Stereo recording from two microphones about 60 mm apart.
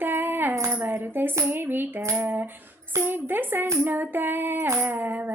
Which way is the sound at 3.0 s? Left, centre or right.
Right.